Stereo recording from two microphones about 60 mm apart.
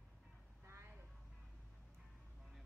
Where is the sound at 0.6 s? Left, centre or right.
Right.